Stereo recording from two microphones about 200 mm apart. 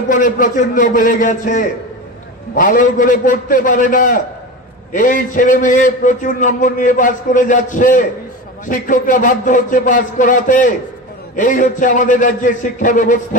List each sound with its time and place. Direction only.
0.1 s a man's voice: 40° left (ahead or behind)